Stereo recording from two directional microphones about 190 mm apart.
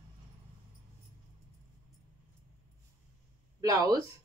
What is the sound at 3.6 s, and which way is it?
Speech, 20° right (ahead or behind).